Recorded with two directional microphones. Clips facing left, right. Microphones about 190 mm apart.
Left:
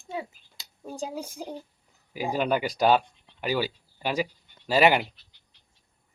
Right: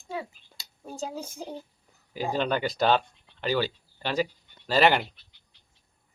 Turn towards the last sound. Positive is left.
turn(degrees=10)  # may be behind; listen again after turning